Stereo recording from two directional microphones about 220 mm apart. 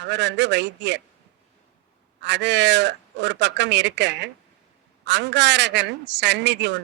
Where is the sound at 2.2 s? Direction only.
55° right (ahead or behind).